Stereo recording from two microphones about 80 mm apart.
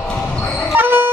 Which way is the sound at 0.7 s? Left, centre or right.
Right.